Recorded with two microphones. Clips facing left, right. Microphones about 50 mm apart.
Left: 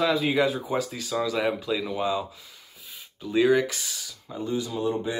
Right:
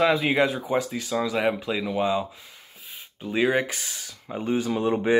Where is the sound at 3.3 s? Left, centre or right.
Right.